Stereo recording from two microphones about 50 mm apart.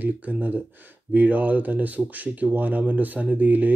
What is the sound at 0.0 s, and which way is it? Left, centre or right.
Speech, right.